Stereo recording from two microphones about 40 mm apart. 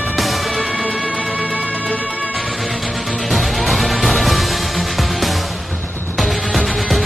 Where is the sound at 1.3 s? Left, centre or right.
Left.